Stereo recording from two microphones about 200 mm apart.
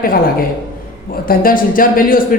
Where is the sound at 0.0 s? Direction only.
45° left (ahead or behind).